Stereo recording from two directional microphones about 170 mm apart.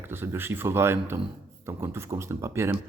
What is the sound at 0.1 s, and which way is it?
Speech, 15° right (ahead or behind).